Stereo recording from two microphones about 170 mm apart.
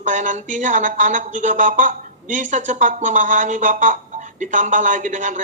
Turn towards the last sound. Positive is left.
turn(degrees=-45)  # may be behind; listen again after turning